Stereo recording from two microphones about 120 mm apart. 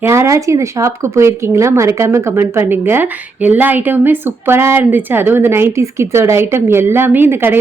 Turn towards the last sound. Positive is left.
turn(degrees=-15)  # may be behind; listen again after turning